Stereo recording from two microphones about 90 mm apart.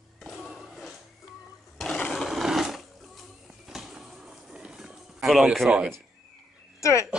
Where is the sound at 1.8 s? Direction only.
5° left (ahead or behind).